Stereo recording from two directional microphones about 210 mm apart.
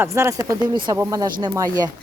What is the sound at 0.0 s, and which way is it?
Speech, 10° right (ahead or behind).